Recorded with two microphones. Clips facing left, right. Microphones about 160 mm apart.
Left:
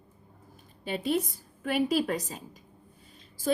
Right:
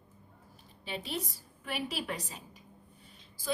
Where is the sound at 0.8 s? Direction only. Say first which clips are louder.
Left 9 dB; 50° left (ahead or behind).